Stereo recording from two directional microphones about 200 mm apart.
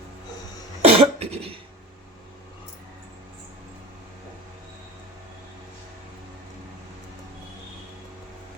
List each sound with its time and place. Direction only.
0.8 s cough: 30° right (ahead or behind)